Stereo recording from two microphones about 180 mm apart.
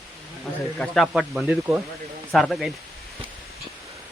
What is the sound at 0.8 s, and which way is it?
Speech, centre (ahead or behind).